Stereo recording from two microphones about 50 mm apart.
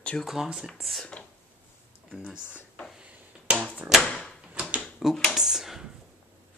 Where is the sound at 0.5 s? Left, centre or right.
Centre.